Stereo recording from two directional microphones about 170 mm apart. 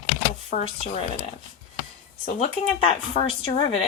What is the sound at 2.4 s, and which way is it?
Speech, 35° left (ahead or behind).